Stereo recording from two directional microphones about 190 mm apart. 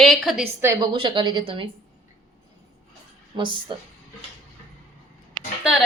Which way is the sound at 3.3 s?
25° right (ahead or behind).